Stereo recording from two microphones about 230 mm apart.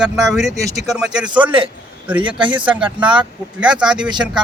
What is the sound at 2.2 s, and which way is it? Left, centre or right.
Speech, right.